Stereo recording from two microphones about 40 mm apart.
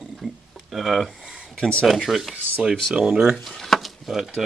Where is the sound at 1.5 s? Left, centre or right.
Left.